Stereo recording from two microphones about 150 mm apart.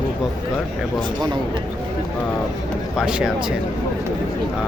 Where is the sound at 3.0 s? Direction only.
5° right (ahead or behind).